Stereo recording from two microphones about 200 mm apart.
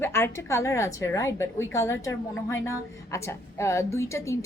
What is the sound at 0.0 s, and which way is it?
A woman's voice, 10° left (ahead or behind).